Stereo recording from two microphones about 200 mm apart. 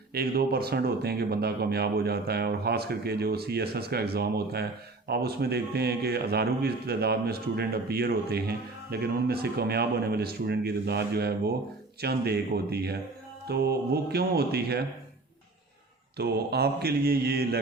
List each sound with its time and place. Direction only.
0.1 s a man's voice: 50° right (ahead or behind)
16.1 s a man's voice: 55° right (ahead or behind)